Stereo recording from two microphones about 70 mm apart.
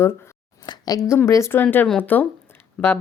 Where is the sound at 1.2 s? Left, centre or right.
Left.